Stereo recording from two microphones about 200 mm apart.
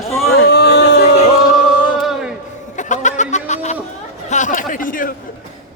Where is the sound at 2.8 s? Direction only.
40° left (ahead or behind).